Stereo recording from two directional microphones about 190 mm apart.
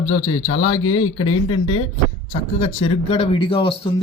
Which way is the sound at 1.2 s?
25° left (ahead or behind).